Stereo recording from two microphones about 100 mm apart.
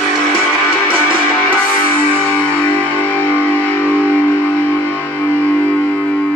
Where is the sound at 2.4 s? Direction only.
15° left (ahead or behind).